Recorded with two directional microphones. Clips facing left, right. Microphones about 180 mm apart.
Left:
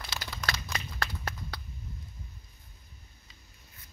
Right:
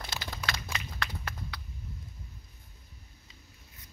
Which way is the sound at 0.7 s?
40° left (ahead or behind).